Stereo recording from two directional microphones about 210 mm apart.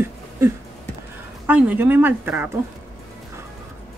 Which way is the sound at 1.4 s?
5° right (ahead or behind).